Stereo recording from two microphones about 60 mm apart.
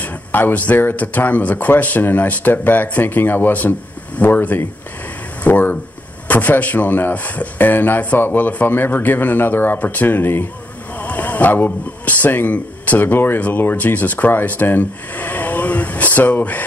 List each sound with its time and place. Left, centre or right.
0.0 s speech: left